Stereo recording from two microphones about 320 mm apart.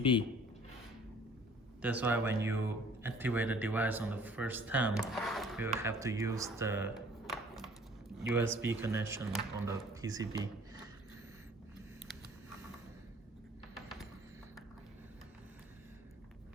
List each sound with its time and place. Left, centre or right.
0.0 s a man's voice: centre
1.8 s speech: centre